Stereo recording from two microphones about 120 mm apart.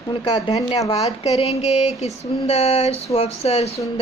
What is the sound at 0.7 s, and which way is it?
Speech, 30° left (ahead or behind).